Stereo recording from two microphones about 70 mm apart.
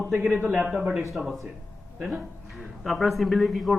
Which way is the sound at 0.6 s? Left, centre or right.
Centre.